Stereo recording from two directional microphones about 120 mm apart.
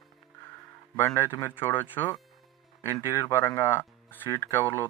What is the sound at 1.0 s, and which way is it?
Speech, 20° left (ahead or behind).